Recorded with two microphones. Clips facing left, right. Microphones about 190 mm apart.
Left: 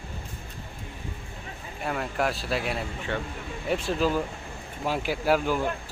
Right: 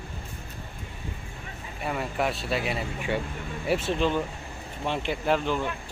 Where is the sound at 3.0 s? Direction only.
10° right (ahead or behind); by 5.6 s 5° left (ahead or behind).